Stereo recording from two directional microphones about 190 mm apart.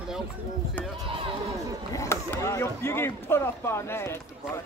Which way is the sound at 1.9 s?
15° left (ahead or behind).